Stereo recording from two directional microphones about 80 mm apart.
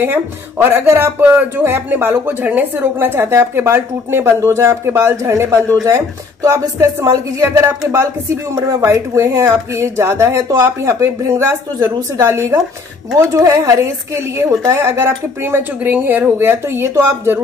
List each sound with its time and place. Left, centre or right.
0.0 s speech: right